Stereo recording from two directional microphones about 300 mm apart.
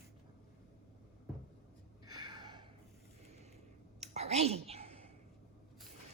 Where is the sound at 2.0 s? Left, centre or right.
Centre.